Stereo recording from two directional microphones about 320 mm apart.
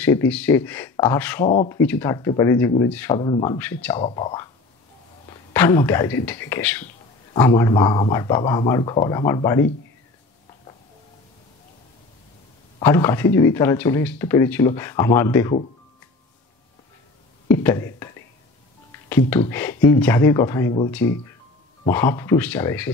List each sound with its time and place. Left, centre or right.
0.0 s speech: centre
12.7 s speech: centre
17.5 s speech: centre
21.9 s speech: centre